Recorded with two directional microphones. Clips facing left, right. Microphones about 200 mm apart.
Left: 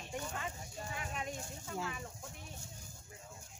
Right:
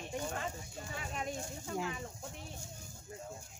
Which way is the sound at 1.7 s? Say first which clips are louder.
Right 3 dB; 15° right (ahead or behind).